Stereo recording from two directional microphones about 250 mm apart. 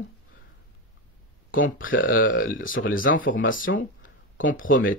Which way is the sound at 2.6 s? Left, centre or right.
Left.